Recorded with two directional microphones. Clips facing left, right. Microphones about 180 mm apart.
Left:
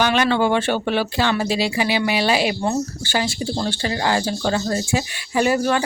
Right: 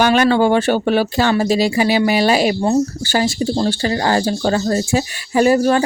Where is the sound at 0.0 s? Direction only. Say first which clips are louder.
Right 5 dB; 45° right (ahead or behind).